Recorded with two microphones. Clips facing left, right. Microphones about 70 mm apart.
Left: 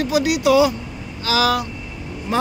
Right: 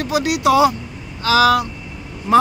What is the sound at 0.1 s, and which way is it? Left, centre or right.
A man's voice, right.